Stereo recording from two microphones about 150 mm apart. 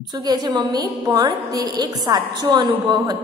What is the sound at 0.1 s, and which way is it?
A woman's voice, 25° right (ahead or behind).